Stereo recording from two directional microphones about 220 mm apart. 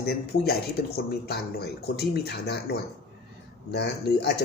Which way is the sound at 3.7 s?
50° left (ahead or behind).